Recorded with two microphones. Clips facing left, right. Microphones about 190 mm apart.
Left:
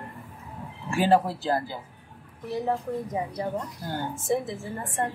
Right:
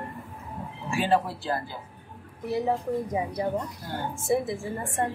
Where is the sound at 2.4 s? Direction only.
10° right (ahead or behind).